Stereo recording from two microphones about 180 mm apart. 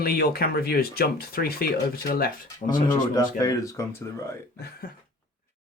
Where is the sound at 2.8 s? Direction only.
20° left (ahead or behind).